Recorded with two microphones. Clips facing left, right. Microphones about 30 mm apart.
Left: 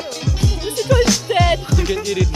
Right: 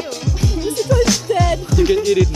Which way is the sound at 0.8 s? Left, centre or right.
Centre.